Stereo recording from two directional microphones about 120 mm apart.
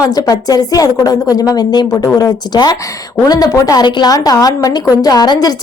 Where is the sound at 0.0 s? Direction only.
30° left (ahead or behind).